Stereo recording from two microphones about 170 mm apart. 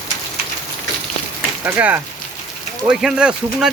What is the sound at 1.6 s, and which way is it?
Speech, 10° right (ahead or behind).